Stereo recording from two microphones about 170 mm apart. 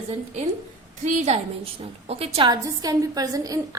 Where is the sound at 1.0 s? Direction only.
40° right (ahead or behind).